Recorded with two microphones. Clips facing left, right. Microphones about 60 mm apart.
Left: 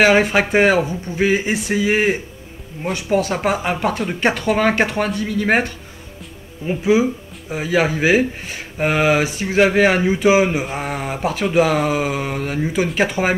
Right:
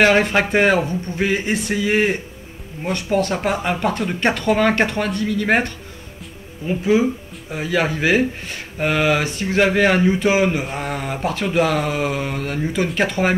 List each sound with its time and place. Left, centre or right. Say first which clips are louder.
0.0 s speech: left 1 dB; centre